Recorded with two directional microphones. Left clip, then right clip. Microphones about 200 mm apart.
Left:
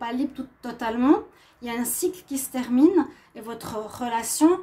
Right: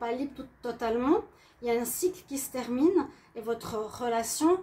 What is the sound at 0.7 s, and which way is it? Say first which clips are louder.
A woman's voice: left 5 dB; 45° left (ahead or behind).